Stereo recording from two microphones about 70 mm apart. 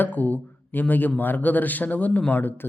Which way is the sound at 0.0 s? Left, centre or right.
Left.